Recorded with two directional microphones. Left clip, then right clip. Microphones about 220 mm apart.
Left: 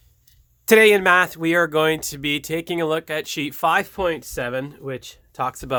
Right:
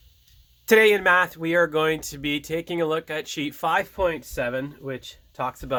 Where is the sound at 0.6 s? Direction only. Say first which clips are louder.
Left 3 dB; 35° left (ahead or behind).